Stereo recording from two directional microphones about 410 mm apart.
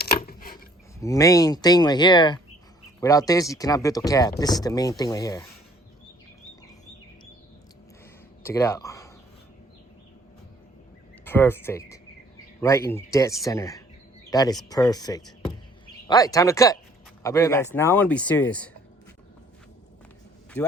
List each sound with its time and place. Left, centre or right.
0.0 s mechanisms: left
0.9 s speech: centre
8.4 s speech: centre
11.3 s speech: centre